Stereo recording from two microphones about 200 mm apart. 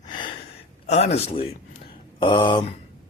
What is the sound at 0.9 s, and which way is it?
Speech, 35° left (ahead or behind).